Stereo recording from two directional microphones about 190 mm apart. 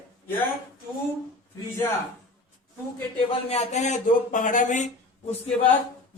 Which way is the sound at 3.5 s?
35° left (ahead or behind).